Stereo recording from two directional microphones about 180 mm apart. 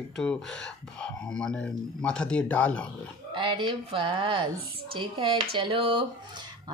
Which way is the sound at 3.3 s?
25° right (ahead or behind).